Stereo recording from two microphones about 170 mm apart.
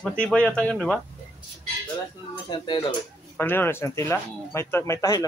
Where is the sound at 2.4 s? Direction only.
25° left (ahead or behind).